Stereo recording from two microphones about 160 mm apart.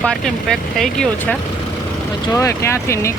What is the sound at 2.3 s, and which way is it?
Speech, 15° left (ahead or behind).